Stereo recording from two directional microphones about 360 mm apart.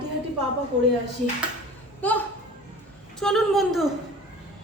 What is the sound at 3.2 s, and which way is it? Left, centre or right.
Speech, centre.